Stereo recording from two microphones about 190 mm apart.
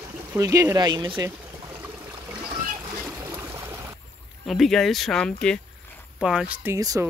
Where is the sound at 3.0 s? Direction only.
15° right (ahead or behind).